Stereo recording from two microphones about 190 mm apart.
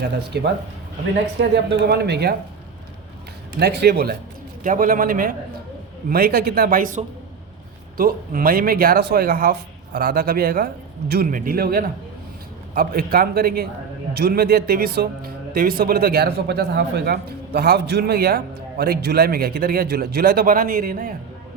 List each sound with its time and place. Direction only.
0.0 s speech: 60° right (ahead or behind)
3.6 s speech: 60° right (ahead or behind)
4.6 s speech: 45° right (ahead or behind)